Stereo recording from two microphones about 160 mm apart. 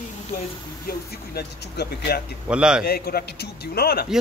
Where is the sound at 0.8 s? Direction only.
85° left.